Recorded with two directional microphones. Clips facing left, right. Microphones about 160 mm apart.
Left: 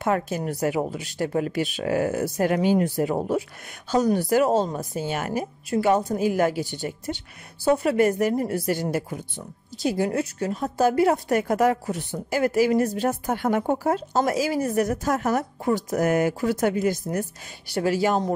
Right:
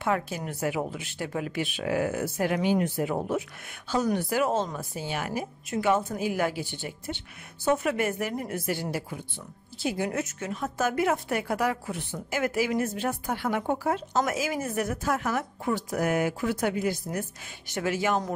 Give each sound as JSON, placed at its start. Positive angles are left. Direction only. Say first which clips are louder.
{"t": 0.0, "sound": "a woman's voice", "louder": "left 4 dB", "side_deg": 45}